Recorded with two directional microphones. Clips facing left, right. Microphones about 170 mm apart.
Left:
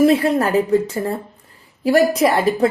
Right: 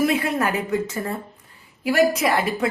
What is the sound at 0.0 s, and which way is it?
Speech, 30° left (ahead or behind).